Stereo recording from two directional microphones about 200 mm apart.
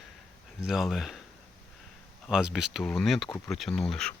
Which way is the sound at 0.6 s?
Centre (ahead or behind).